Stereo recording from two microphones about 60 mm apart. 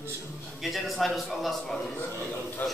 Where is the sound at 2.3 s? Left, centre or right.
Left.